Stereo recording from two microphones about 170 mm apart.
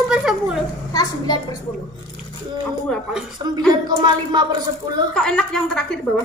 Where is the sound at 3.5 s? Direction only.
25° right (ahead or behind).